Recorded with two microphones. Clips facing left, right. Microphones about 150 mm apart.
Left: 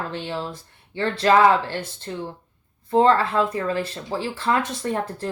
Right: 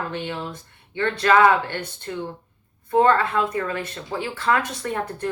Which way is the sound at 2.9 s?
25° left (ahead or behind).